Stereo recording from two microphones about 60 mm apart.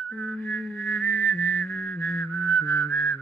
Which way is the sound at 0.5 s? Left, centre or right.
Left.